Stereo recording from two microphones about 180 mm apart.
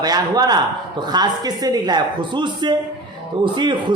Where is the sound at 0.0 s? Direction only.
20° right (ahead or behind).